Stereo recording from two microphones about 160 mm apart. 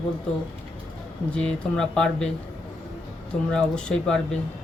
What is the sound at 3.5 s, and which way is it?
Speech, 5° left (ahead or behind).